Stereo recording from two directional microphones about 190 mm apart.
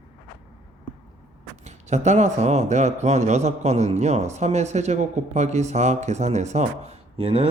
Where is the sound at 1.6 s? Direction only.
35° right (ahead or behind).